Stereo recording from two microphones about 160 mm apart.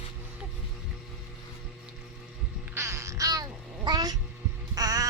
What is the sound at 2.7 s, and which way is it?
Babbling, 15° right (ahead or behind).